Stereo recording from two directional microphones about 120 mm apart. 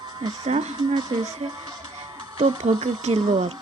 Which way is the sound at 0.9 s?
35° right (ahead or behind).